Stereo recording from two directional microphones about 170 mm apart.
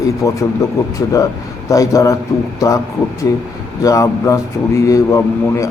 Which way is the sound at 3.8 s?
20° left (ahead or behind).